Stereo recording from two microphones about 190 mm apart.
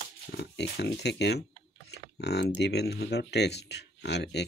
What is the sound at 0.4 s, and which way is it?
Speech, 60° left (ahead or behind).